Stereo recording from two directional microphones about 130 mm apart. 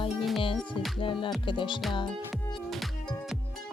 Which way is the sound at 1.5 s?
40° left (ahead or behind).